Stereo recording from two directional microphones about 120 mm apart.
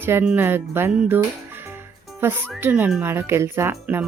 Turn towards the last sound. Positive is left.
turn(degrees=-20)  # may be behind; listen again after turning